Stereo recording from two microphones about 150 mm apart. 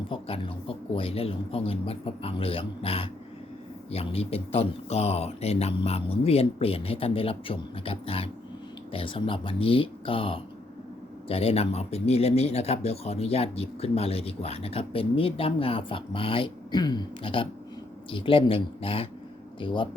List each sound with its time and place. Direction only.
0.1 s speech: 40° left (ahead or behind)